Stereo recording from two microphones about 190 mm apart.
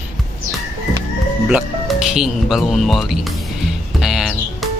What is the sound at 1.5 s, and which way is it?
Speech, 5° right (ahead or behind).